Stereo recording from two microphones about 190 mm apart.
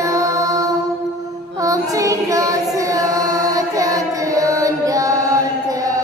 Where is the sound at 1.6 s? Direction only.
15° right (ahead or behind).